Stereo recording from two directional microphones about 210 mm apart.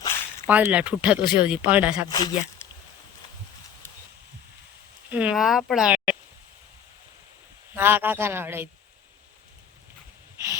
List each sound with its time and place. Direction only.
0.4 s speech: 5° right (ahead or behind)
2.0 s speech: 20° left (ahead or behind)
2.6 s a sound: 10° left (ahead or behind)
5.0 s speech: 5° right (ahead or behind)
7.8 s speech: 10° right (ahead or behind)
10.3 s a sound: 15° right (ahead or behind)